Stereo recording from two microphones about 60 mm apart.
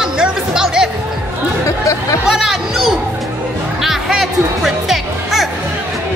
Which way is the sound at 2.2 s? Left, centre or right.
Centre.